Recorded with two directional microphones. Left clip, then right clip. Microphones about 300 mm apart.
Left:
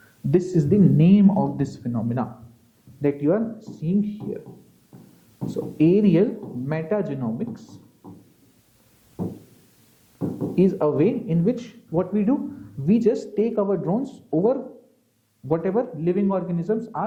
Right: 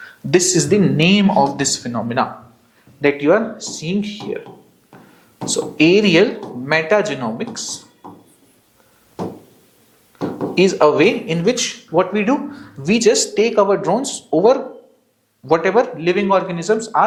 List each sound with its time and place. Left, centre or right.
0.0 s speech: centre
5.7 s speech: centre
6.4 s speech: right
6.7 s speech: centre
9.1 s a sound: centre
10.2 s speech: centre